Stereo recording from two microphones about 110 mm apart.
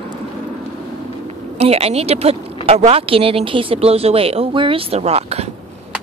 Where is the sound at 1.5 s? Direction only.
70° right (ahead or behind).